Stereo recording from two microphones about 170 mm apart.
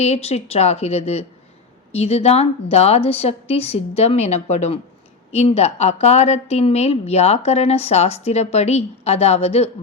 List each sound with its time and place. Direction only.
0.0 s a woman's voice: 40° left (ahead or behind)